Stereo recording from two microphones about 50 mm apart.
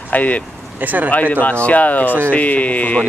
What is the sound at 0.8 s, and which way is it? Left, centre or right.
Speech, right.